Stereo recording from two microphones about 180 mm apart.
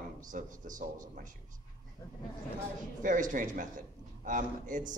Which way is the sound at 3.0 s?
45° right (ahead or behind).